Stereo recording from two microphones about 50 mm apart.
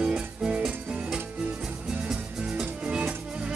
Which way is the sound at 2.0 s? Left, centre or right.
Centre.